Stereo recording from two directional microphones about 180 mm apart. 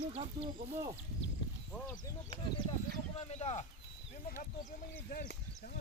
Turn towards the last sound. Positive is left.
turn(degrees=55)  # may be behind; listen again after turning